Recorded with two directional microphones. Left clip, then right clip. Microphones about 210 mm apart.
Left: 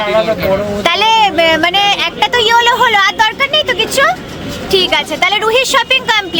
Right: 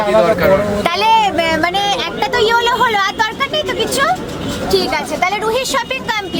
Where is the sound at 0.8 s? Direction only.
45° left (ahead or behind).